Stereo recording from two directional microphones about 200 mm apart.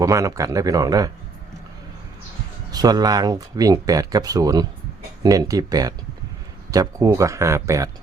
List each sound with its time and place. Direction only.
0.0 s speech: 15° right (ahead or behind)
2.7 s speech: 20° right (ahead or behind)